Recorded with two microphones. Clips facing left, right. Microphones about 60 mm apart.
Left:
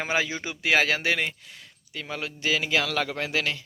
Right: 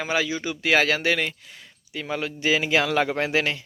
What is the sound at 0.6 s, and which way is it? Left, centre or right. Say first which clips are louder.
Speech: right 2 dB; centre.